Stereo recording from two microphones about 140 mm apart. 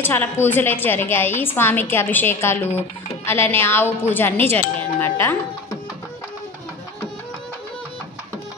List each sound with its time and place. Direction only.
0.0 s a woman's voice: 15° left (ahead or behind)